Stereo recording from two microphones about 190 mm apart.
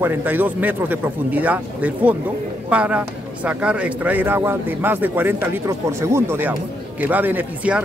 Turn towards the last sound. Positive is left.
turn(degrees=-10)  # may be behind; listen again after turning